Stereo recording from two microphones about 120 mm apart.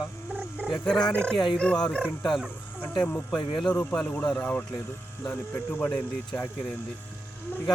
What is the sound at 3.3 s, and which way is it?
Speech, 40° left (ahead or behind).